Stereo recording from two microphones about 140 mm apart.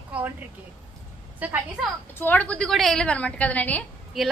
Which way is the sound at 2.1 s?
15° left (ahead or behind).